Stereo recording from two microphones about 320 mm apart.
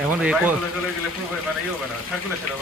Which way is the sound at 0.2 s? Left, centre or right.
Centre.